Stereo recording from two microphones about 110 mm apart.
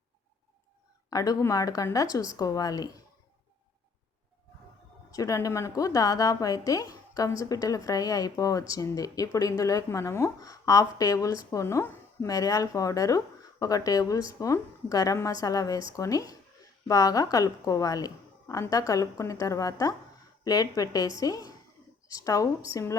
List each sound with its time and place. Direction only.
1.1 s a woman's voice: 30° left (ahead or behind)
5.1 s a woman's voice: 30° left (ahead or behind)